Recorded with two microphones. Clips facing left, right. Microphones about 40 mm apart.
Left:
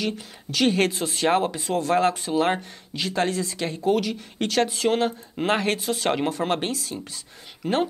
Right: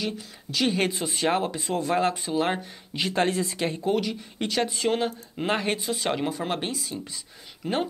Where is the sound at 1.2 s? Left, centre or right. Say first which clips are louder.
Left 4 dB; centre.